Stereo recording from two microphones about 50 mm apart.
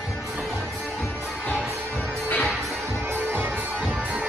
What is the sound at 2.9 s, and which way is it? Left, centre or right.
Music, right.